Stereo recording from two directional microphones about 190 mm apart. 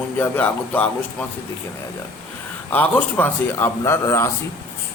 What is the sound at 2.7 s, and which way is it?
A man's voice, 10° left (ahead or behind).